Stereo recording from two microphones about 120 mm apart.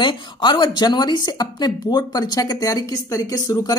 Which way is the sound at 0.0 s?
40° left (ahead or behind).